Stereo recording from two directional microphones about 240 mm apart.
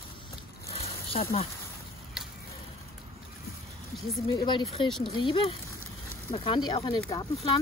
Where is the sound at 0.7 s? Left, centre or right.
Left.